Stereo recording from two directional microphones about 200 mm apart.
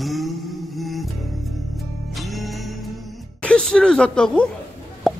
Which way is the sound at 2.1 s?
Centre (ahead or behind).